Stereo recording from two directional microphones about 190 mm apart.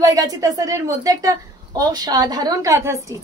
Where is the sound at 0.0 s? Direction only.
20° right (ahead or behind).